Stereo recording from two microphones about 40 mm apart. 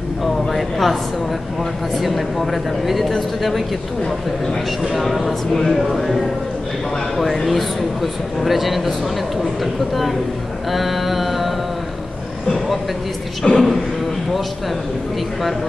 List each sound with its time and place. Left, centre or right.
0.2 s a sound: centre
2.0 s speech: centre
4.9 s speech: centre
5.5 s speech: centre
5.8 s speech: centre
7.2 s speech: centre
10.7 s mantra: centre
13.4 s a man's voice: centre